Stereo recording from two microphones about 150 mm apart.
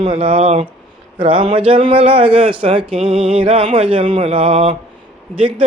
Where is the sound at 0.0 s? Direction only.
40° right (ahead or behind).